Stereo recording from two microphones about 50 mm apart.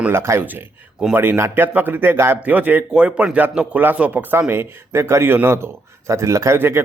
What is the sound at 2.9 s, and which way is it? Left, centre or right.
Speech, right.